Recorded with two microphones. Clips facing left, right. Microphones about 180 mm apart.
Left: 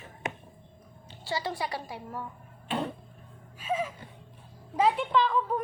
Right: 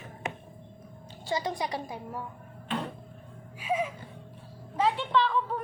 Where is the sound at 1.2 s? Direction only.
20° right (ahead or behind).